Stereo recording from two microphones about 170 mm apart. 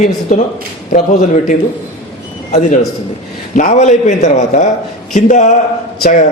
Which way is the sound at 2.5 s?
45° left (ahead or behind).